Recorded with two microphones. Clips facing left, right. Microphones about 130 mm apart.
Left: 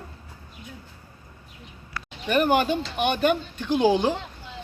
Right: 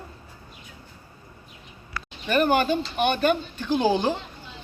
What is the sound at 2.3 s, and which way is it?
Speech, 15° left (ahead or behind).